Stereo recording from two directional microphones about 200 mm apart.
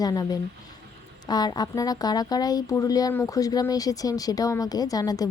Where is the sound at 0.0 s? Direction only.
20° left (ahead or behind).